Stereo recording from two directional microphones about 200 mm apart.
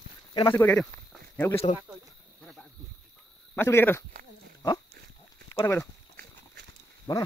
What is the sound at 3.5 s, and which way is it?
Speech, 10° left (ahead or behind).